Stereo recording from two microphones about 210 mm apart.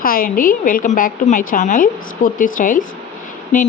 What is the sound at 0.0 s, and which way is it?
Speech, 45° left (ahead or behind).